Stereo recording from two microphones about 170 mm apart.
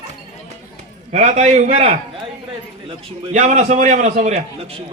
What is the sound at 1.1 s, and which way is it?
Speech, 40° right (ahead or behind).